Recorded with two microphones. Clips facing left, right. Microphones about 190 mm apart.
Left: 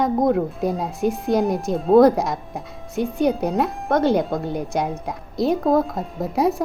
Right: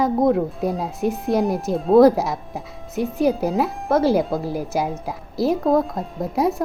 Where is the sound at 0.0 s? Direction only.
Centre (ahead or behind).